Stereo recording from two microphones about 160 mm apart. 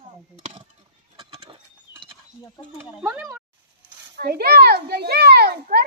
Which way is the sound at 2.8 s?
15° right (ahead or behind).